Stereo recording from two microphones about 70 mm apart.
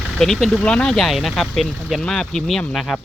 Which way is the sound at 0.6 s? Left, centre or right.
Centre.